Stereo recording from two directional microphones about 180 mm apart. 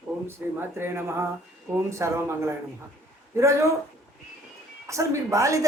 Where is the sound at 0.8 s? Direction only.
15° right (ahead or behind).